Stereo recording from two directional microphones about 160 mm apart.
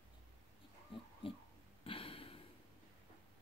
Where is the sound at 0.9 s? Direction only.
35° left (ahead or behind).